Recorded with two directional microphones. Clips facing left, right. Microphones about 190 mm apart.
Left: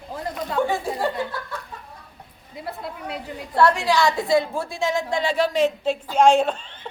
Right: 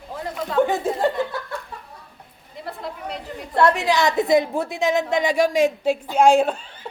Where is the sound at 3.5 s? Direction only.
20° right (ahead or behind).